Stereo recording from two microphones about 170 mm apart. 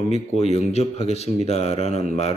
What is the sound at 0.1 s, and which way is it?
Speech, 40° left (ahead or behind).